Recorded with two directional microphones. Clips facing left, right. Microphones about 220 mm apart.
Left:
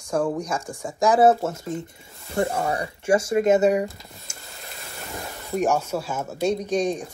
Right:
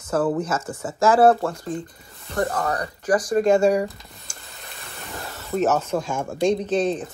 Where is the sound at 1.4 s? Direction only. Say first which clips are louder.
Right 1 dB; 25° left (ahead or behind).